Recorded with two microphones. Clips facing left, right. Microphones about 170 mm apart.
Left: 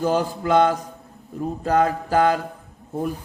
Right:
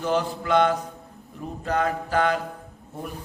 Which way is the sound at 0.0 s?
40° left (ahead or behind).